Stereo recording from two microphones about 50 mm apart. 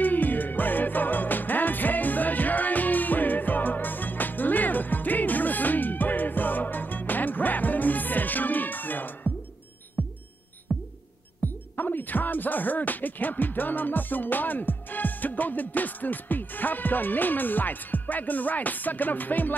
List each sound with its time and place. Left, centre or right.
0.0 s music: left
11.4 s music: left